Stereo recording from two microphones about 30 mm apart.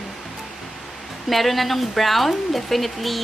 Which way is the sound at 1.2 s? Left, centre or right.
Centre.